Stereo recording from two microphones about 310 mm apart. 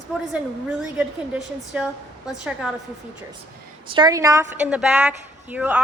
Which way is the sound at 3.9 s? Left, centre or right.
Centre.